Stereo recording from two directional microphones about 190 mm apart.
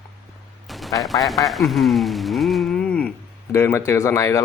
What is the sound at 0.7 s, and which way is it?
Speech, centre (ahead or behind).